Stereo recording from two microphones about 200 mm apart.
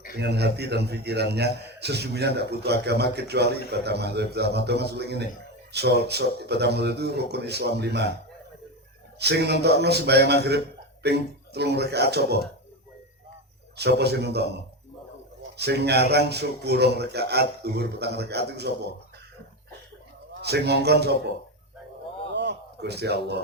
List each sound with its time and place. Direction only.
0.2 s a man's voice: 55° right (ahead or behind)
9.1 s a man's voice: 55° right (ahead or behind)
13.7 s a man's voice: 55° right (ahead or behind)
15.5 s a man's voice: 55° right (ahead or behind)
20.4 s a man's voice: 55° right (ahead or behind)
22.3 s a sound: 60° right (ahead or behind)